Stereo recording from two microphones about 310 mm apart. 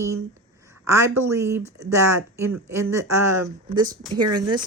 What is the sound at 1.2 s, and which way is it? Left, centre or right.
Speech, centre.